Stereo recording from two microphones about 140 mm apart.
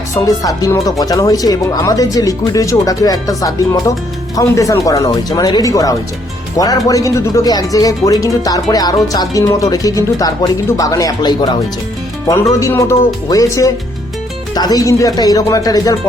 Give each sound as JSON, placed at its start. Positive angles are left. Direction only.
{"t": 0.1, "sound": "speech", "side_deg": 25}